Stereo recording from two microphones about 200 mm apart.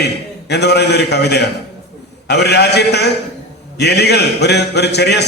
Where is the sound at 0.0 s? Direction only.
55° left (ahead or behind).